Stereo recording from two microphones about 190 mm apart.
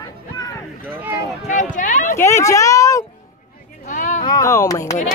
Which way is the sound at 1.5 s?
40° left (ahead or behind).